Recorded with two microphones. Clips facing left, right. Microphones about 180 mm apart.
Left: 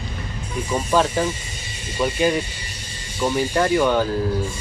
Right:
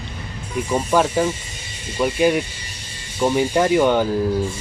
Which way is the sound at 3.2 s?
15° right (ahead or behind).